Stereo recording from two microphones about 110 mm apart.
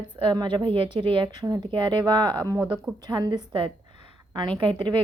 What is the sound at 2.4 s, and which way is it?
Speech, 30° right (ahead or behind).